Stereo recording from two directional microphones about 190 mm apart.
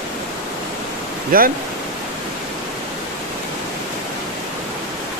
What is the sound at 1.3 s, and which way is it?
Speech, 50° right (ahead or behind).